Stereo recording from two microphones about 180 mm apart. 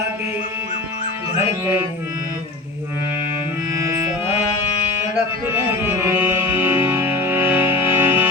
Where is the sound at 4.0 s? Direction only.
10° right (ahead or behind).